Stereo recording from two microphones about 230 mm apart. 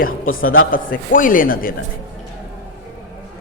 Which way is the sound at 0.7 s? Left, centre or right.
Left.